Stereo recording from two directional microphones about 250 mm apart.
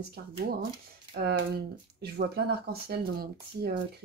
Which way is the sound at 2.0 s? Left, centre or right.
Right.